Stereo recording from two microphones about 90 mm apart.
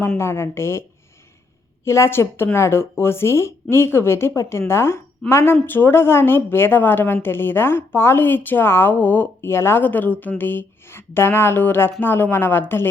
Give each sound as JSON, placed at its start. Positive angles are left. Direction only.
{"t": 0.2, "sound": "a woman's voice", "side_deg": 30}